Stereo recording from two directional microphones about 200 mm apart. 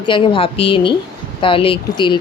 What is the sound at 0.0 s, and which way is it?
Speech, 25° left (ahead or behind).